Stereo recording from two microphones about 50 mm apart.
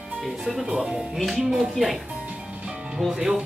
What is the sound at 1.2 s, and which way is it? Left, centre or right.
Speech, centre.